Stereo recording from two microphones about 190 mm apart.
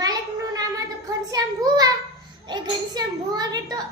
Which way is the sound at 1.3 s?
20° right (ahead or behind).